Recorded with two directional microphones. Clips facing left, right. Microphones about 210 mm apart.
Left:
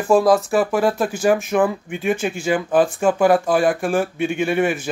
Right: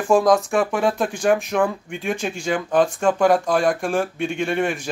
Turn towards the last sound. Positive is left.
turn(degrees=5)  # may be behind; listen again after turning